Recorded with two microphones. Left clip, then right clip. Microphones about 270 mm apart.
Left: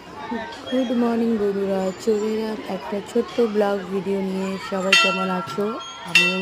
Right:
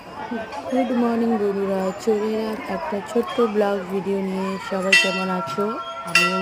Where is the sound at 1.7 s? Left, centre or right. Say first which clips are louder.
Even; centre.